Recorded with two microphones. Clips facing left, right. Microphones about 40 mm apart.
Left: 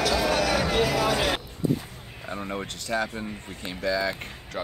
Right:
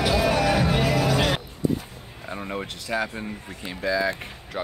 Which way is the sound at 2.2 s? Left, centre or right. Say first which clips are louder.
Right 1 dB; centre.